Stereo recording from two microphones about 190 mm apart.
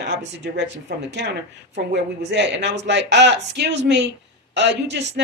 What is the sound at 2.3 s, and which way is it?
Speech, 65° right (ahead or behind).